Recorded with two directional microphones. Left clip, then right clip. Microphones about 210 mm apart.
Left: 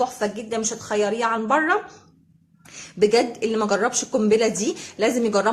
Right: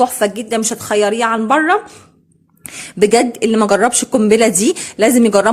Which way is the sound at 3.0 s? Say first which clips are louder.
Right 7 dB; 35° right (ahead or behind).